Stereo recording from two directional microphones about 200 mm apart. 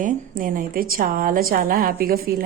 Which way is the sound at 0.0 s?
45° right (ahead or behind).